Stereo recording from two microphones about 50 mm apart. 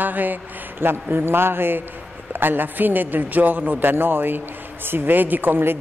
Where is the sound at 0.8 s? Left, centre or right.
Right.